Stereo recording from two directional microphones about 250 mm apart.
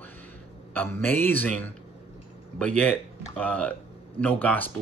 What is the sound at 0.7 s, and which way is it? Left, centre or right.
Speech, centre.